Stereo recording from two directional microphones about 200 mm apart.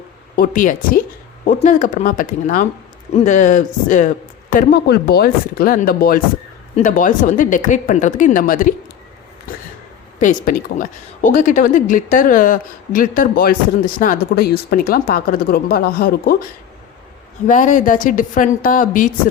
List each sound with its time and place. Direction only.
0.3 s speech: 45° left (ahead or behind)
10.2 s speech: 40° left (ahead or behind)
17.4 s speech: 40° left (ahead or behind)